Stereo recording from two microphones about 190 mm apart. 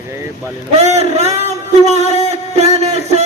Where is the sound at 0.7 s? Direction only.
35° right (ahead or behind).